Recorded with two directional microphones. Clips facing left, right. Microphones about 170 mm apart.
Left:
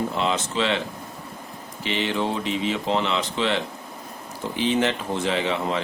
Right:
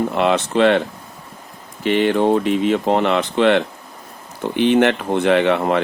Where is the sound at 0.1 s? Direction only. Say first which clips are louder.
Right 8 dB; 65° right (ahead or behind).